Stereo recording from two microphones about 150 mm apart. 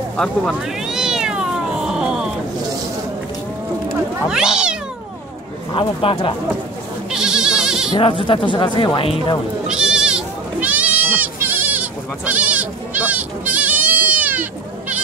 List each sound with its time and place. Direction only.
0.2 s cat: centre (ahead or behind)
4.3 s speech: 5° right (ahead or behind)
5.7 s speech: 35° left (ahead or behind)
7.1 s goat: 5° right (ahead or behind)
8.0 s speech: 35° left (ahead or behind)
9.7 s goat: 5° right (ahead or behind)